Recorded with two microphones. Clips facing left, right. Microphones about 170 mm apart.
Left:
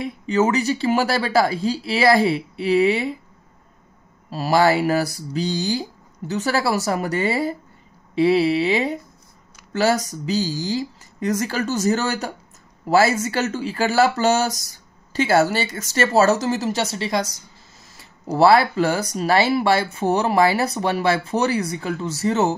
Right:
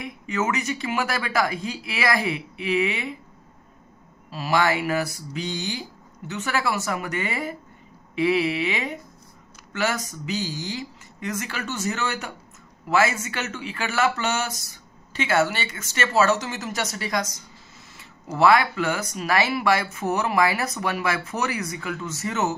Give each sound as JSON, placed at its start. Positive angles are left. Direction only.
{"t": 0.0, "sound": "speech", "side_deg": 30}
{"t": 4.3, "sound": "speech", "side_deg": 40}